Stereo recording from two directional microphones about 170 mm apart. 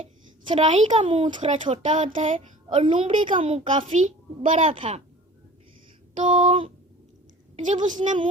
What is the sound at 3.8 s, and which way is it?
Speech, 45° right (ahead or behind).